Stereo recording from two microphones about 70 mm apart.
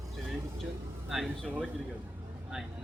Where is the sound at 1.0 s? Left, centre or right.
Centre.